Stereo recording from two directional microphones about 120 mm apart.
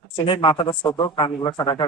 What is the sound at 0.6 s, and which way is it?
Speech, 45° left (ahead or behind).